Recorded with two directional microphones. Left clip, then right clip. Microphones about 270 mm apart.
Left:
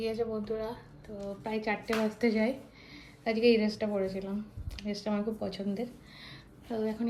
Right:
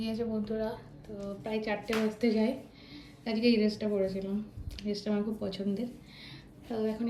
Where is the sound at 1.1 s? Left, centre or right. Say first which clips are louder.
Left 1 dB; centre.